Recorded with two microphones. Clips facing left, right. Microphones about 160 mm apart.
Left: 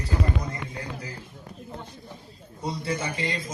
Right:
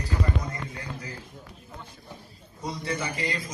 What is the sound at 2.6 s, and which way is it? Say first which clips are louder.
Speech: left 2 dB; 30° left (ahead or behind).